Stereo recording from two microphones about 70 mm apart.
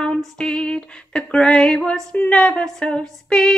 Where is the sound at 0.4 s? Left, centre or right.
Centre.